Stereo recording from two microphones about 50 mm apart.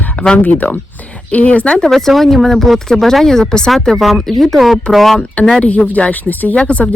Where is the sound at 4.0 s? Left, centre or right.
Centre.